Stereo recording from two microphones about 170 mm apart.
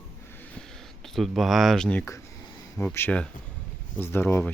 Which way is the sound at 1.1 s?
Centre (ahead or behind).